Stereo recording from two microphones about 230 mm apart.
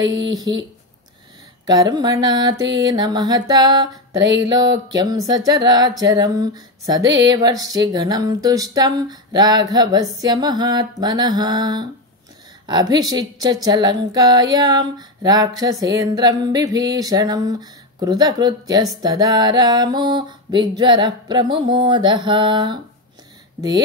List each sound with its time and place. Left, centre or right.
0.0 s speech: centre
1.7 s speech: centre